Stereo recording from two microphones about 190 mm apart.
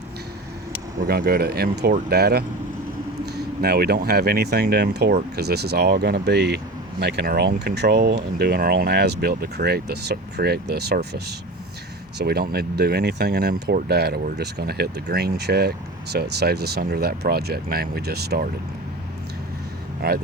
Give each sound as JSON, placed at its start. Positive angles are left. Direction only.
{"t": 0.9, "sound": "speech", "side_deg": -55}